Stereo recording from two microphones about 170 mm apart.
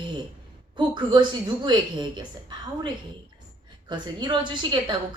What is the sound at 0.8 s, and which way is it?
A woman's voice, 25° right (ahead or behind).